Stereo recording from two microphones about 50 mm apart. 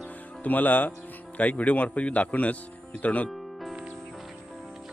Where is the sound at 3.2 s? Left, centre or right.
Centre.